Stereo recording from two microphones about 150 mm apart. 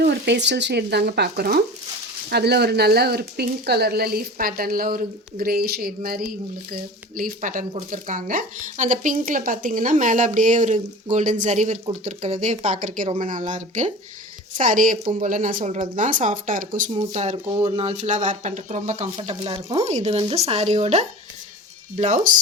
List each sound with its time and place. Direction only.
0.5 s speech: 90° right
7.2 s speech: 65° right (ahead or behind)
16.9 s speech: 50° right (ahead or behind)
17.3 s speech: 35° right (ahead or behind); by 22.4 s 55° right (ahead or behind)